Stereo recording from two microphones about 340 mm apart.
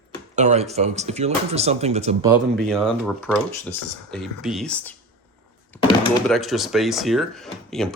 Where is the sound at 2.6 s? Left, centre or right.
Centre.